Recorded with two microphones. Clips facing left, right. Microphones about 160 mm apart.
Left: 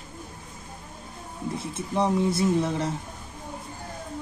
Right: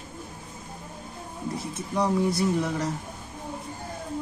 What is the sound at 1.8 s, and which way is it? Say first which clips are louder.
Speech: left 1 dB; 25° left (ahead or behind).